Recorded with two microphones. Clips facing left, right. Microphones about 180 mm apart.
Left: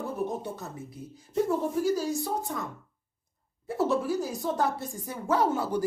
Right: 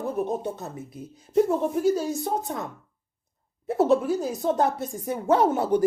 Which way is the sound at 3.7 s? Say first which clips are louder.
Right 6 dB; 20° right (ahead or behind).